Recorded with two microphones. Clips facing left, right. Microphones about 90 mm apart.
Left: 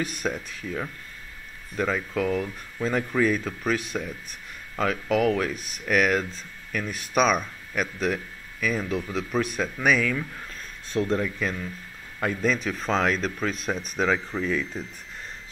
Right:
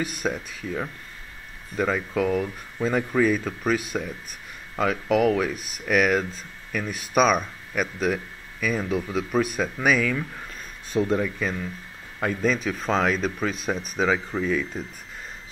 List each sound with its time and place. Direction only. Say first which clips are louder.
0.0 s speech: right 1 dB; 5° right (ahead or behind)